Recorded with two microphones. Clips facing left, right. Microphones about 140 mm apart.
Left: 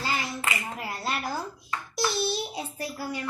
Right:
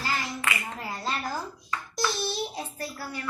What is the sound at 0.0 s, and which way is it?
Clapping, 25° left (ahead or behind).